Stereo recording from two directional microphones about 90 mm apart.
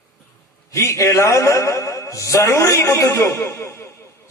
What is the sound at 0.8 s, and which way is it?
A man's voice, 35° left (ahead or behind).